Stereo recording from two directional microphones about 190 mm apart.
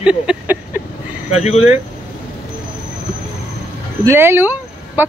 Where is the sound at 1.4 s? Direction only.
35° left (ahead or behind).